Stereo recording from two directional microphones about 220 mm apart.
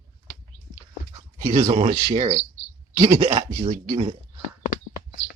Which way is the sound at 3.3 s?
25° right (ahead or behind).